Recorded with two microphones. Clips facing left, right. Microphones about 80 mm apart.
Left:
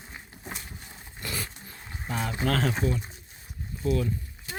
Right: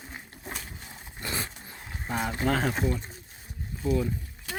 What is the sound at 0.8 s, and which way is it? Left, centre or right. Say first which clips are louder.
Roaring cats: right 1 dB; right.